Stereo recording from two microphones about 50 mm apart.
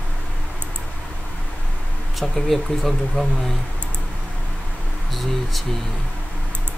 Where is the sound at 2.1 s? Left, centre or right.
Centre.